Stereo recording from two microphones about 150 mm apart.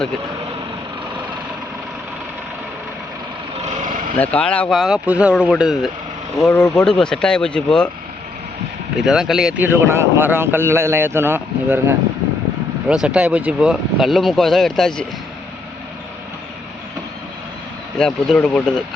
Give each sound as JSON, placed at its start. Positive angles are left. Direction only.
{"t": 3.6, "sound": "vehicle", "side_deg": -55}
{"t": 4.2, "sound": "speech", "side_deg": 10}
{"t": 9.0, "sound": "a man's voice", "side_deg": -5}
{"t": 17.9, "sound": "speech", "side_deg": 5}